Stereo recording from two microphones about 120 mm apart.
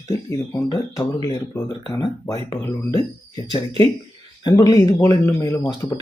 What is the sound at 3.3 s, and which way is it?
Speech, 35° left (ahead or behind).